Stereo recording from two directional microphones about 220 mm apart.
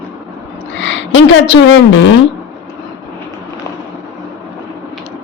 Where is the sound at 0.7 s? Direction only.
60° left (ahead or behind).